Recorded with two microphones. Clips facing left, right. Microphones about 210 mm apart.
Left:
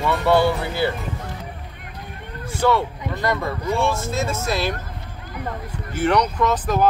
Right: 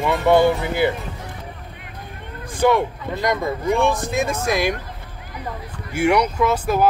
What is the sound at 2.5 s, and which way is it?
Speech, 15° right (ahead or behind).